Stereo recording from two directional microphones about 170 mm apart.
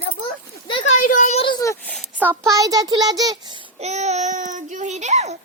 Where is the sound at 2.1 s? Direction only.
15° right (ahead or behind).